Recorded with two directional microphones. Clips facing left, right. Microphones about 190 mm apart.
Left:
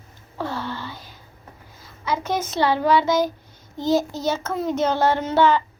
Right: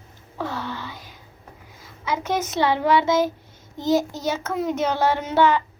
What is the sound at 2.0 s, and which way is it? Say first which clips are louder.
A child's voice: even; 20° right (ahead or behind).